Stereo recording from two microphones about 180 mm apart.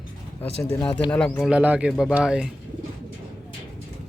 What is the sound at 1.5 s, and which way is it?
Speech, 10° right (ahead or behind).